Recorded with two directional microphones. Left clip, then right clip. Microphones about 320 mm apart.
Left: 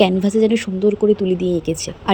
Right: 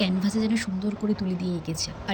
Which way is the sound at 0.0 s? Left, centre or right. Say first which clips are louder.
Left 13 dB; centre.